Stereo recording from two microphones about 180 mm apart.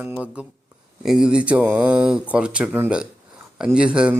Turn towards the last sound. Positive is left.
turn(degrees=-5)  # may be behind; listen again after turning